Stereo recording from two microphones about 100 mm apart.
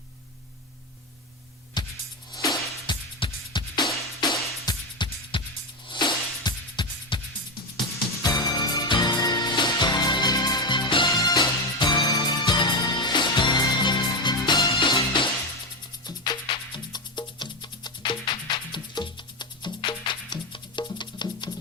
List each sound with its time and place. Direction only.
1.8 s music: 45° left (ahead or behind)
2.3 s music: 35° left (ahead or behind)
2.8 s music: 50° left (ahead or behind)
5.3 s music: 60° left (ahead or behind)
8.2 s music: 40° left (ahead or behind)